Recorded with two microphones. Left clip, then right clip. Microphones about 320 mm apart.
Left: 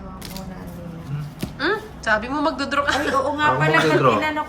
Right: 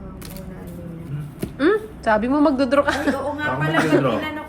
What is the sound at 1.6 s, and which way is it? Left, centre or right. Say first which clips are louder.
A woman's voice: right 4 dB; centre.